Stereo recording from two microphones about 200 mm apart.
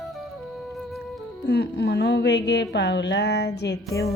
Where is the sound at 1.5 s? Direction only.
55° left (ahead or behind).